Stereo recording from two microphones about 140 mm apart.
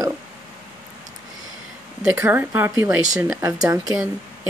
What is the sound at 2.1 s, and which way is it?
A woman's voice, 15° right (ahead or behind).